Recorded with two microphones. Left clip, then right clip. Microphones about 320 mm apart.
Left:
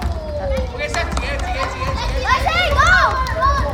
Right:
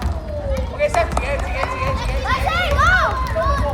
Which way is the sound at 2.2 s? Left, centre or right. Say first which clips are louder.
Left 4 dB; left.